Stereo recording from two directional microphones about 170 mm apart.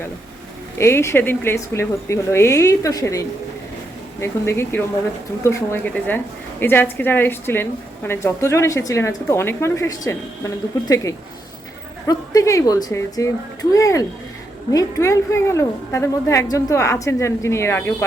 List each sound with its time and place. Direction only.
0.8 s a woman's voice: 15° left (ahead or behind)